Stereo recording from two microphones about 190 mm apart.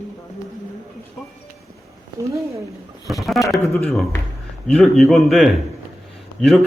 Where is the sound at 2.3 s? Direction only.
15° right (ahead or behind).